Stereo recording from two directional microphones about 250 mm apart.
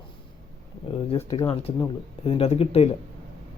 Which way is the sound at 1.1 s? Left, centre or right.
Centre.